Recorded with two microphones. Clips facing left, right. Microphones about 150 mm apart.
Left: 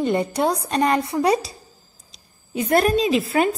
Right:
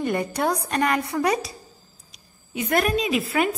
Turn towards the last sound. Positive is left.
turn(degrees=30)  # may be behind; listen again after turning